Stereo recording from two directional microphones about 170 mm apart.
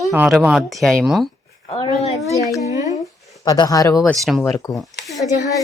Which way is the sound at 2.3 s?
20° left (ahead or behind).